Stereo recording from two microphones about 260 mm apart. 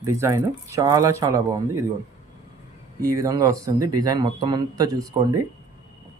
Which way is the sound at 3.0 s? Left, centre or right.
Centre.